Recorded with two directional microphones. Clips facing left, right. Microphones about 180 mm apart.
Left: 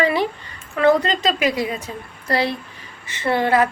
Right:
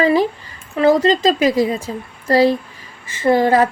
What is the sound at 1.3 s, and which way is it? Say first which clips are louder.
A woman's voice: right 6 dB; 40° right (ahead or behind).